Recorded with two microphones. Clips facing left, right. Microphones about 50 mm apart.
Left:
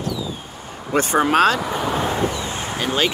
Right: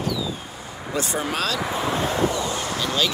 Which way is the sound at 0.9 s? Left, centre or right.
Left.